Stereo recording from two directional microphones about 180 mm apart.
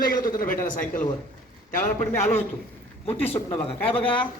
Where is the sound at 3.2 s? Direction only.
30° left (ahead or behind).